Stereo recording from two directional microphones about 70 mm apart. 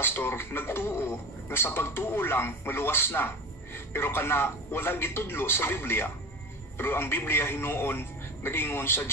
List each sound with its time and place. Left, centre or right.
0.0 s speech: left